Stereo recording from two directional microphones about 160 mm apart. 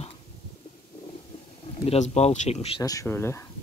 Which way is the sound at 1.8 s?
45° left (ahead or behind).